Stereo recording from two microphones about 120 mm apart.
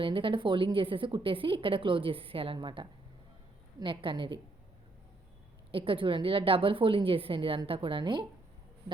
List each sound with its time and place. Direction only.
0.0 s a woman's voice: 45° right (ahead or behind)
5.7 s a woman's voice: 45° right (ahead or behind)